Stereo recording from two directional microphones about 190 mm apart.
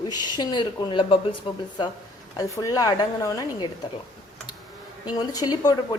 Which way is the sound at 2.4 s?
15° left (ahead or behind).